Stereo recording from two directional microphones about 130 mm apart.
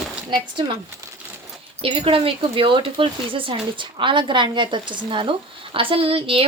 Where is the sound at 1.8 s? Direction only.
45° right (ahead or behind).